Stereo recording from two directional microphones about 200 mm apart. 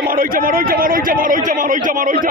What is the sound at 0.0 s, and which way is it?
A man's voice, 45° right (ahead or behind).